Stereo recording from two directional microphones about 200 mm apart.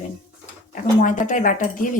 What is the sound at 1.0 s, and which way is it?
Speech, 40° left (ahead or behind).